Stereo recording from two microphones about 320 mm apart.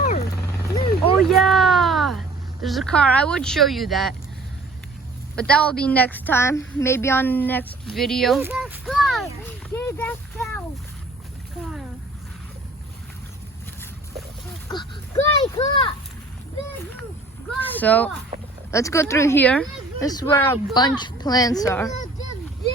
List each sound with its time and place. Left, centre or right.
0.0 s helicopter: left
1.3 s a woman's voice: centre
5.4 s a woman's voice: centre
9.7 s a sound: centre
14.7 s speech: centre
17.6 s a woman's voice: centre